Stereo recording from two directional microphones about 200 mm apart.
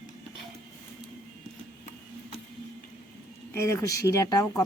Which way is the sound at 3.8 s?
15° left (ahead or behind).